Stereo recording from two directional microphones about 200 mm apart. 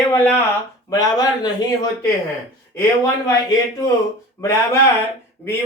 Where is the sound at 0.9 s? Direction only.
20° left (ahead or behind).